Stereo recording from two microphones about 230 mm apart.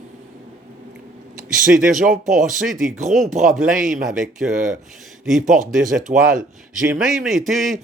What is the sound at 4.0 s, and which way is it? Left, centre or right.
Speech, centre.